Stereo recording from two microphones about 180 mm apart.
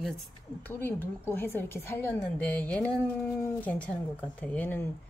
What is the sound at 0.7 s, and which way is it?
A woman's voice, 10° left (ahead or behind).